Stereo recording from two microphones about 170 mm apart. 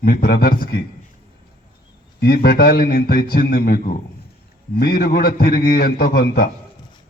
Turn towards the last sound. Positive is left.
turn(degrees=60)  # may be behind; listen again after turning